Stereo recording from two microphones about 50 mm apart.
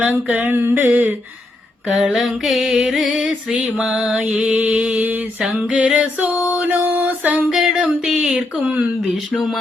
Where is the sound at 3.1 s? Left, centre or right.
Centre.